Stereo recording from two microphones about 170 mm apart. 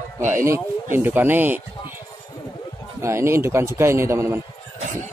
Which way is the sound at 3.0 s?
15° right (ahead or behind).